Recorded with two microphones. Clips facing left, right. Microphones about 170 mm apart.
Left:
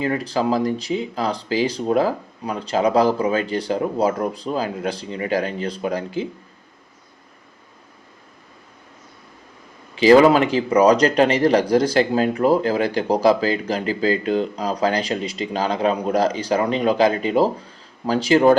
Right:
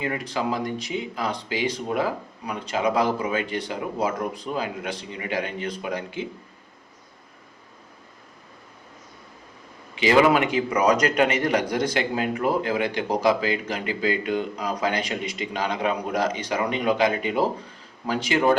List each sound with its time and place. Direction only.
0.0 s speech: 35° left (ahead or behind)
9.9 s speech: 35° left (ahead or behind)